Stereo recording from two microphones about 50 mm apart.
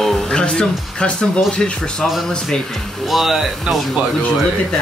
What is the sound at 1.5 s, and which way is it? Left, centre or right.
Speech, left.